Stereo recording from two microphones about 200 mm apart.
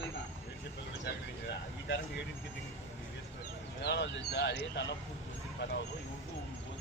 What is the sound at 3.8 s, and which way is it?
Speech, 60° left (ahead or behind).